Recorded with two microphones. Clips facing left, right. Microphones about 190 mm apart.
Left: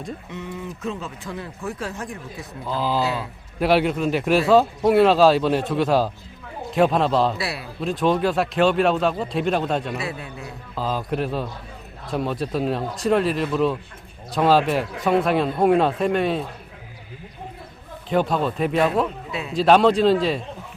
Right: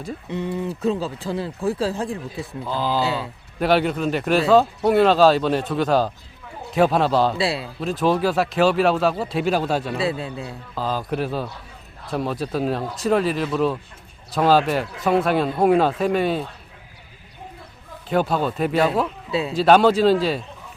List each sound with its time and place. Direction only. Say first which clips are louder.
0.3 s a man's voice: right 7 dB; 30° right (ahead or behind)
2.6 s speech: even; centre (ahead or behind)
3.0 s a man's voice: right 1 dB; 30° right (ahead or behind)
3.6 s speech: even; centre (ahead or behind)
7.3 s a man's voice: right 6 dB; 25° right (ahead or behind)
7.8 s speech: even; centre (ahead or behind)
10.0 s a man's voice: right 6 dB; 30° right (ahead or behind)
10.8 s speech: even; centre (ahead or behind)
18.1 s speech: even; centre (ahead or behind)
19.3 s speech: right 6 dB; 30° right (ahead or behind)
19.5 s speech: even; centre (ahead or behind)